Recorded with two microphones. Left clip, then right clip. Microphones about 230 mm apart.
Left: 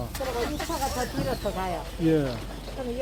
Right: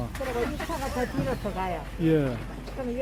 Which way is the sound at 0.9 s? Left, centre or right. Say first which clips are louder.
Even; left.